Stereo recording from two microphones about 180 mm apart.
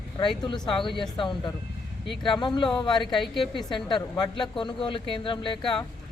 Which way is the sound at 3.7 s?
25° left (ahead or behind).